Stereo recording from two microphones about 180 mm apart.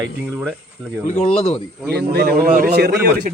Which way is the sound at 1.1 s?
40° left (ahead or behind).